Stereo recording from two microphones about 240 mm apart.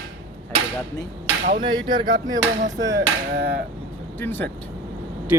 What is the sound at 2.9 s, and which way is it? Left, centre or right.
Hammer, right.